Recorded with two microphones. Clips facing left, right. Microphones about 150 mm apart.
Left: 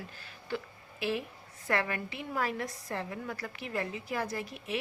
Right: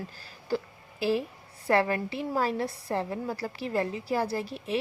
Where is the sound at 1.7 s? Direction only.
35° right (ahead or behind).